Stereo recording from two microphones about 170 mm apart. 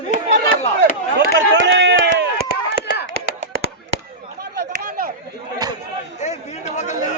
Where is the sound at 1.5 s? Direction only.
90° right.